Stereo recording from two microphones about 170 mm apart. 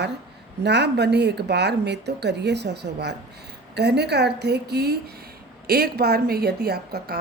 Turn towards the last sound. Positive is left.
turn(degrees=-65)  # may be behind; listen again after turning